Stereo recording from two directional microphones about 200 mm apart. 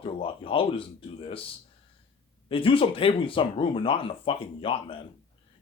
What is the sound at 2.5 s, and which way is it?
Speech, 25° left (ahead or behind).